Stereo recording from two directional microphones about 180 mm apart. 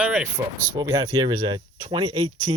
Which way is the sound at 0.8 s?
20° right (ahead or behind).